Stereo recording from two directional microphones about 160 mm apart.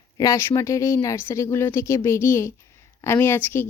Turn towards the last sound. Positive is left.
turn(degrees=15)  # may be behind; listen again after turning